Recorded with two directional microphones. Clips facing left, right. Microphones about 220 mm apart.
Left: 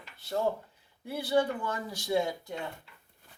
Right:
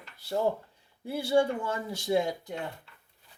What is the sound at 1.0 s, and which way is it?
Speech, 25° right (ahead or behind).